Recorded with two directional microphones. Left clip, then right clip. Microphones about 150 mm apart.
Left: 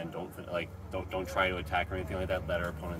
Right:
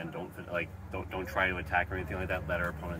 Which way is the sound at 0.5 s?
25° left (ahead or behind).